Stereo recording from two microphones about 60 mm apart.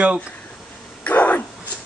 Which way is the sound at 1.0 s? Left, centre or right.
Left.